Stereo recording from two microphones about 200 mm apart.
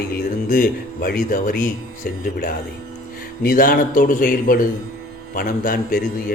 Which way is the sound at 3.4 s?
45° left (ahead or behind).